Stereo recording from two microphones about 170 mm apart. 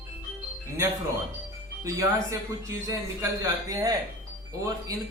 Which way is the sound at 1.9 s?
20° right (ahead or behind).